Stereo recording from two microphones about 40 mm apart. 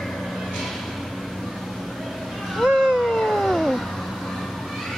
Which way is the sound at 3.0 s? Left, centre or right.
Centre.